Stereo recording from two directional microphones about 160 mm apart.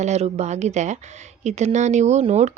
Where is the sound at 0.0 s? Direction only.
45° right (ahead or behind).